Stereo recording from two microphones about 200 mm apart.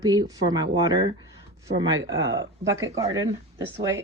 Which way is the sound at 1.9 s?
75° right (ahead or behind).